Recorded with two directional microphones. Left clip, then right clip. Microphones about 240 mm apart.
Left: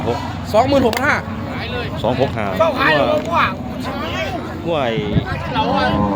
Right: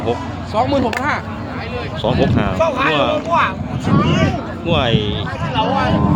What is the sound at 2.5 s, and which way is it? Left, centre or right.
Speech, centre.